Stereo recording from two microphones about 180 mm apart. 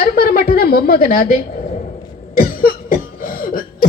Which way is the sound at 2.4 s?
55° left (ahead or behind).